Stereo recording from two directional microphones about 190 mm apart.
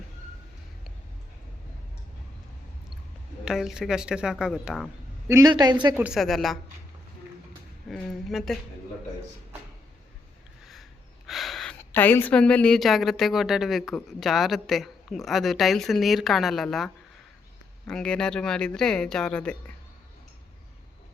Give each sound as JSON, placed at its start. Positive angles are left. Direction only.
{"t": 3.4, "sound": "a woman's voice", "side_deg": 0}
{"t": 5.3, "sound": "a woman's voice", "side_deg": -20}
{"t": 5.9, "sound": "a woman's voice", "side_deg": -5}
{"t": 7.9, "sound": "a sound", "side_deg": 0}
{"t": 11.3, "sound": "a woman's voice", "side_deg": 0}